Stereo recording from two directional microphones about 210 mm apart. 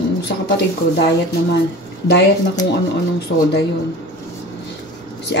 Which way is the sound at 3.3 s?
55° left (ahead or behind).